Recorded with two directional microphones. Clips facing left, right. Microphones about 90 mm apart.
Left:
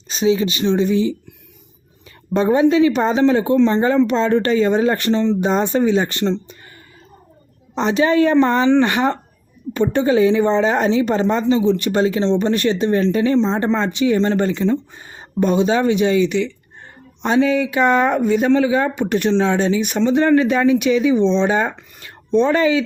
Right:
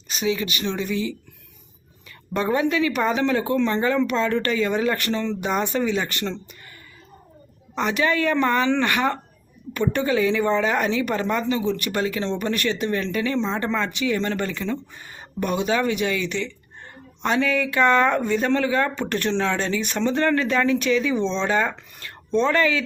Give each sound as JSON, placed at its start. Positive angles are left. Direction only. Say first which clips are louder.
{"t": 0.1, "sound": "speech", "louder": "left 7 dB", "side_deg": 30}
{"t": 2.3, "sound": "speech", "louder": "left 7 dB", "side_deg": 25}
{"t": 7.8, "sound": "speech", "louder": "left 7 dB", "side_deg": 25}